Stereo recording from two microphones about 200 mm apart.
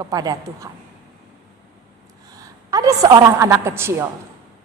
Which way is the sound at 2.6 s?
20° right (ahead or behind).